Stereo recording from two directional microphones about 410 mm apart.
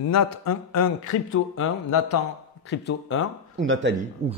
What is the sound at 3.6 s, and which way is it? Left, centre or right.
Speech, right.